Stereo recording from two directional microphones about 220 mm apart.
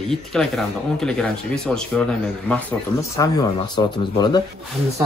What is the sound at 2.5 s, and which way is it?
Speech, 15° left (ahead or behind).